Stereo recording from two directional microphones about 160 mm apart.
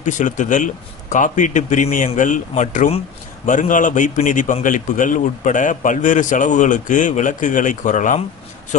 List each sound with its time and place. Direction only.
0.0 s a man's voice: 50° left (ahead or behind)